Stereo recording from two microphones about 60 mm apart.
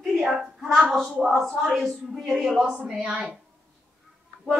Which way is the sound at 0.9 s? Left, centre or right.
Centre.